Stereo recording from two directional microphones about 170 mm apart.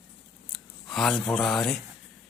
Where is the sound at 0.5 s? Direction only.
Centre (ahead or behind).